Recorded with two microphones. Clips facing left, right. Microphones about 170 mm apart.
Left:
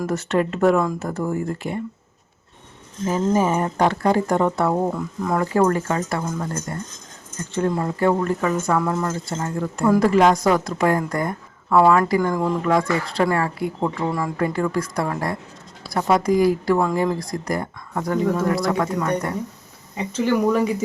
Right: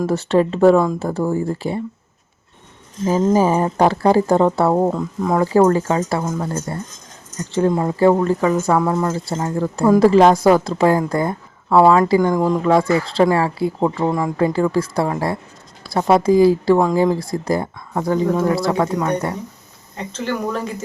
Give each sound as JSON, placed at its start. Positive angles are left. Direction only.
{"t": 0.0, "sound": "speech", "side_deg": -30}
{"t": 3.1, "sound": "speech", "side_deg": -35}
{"t": 4.9, "sound": "a woman's voice", "side_deg": -20}
{"t": 7.5, "sound": "a woman's voice", "side_deg": -25}
{"t": 14.1, "sound": "a woman's voice", "side_deg": -20}
{"t": 20.0, "sound": "speech", "side_deg": 10}